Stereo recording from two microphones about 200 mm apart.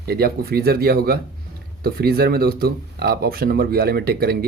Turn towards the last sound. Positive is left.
turn(degrees=-50)  # may be behind; listen again after turning